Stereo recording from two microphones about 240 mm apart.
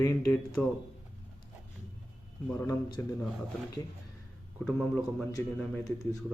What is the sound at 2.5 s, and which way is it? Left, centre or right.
Speech, centre.